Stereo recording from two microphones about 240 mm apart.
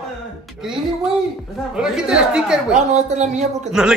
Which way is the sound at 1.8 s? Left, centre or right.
Centre.